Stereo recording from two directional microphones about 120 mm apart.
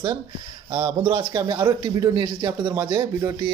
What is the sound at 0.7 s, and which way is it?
A man's voice, 40° right (ahead or behind).